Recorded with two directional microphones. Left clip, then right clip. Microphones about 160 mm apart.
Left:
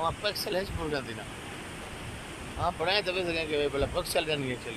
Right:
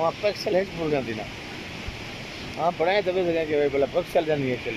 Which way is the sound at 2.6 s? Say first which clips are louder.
Right 6 dB; 5° right (ahead or behind).